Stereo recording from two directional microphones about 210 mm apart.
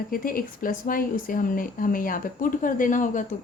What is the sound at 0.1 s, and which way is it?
Speech, 45° left (ahead or behind).